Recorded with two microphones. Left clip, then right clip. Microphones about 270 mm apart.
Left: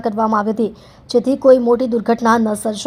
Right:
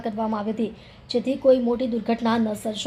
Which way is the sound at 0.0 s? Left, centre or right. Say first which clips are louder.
Left 10 dB; left.